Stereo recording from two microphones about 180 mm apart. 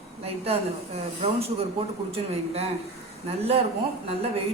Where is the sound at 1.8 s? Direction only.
30° right (ahead or behind).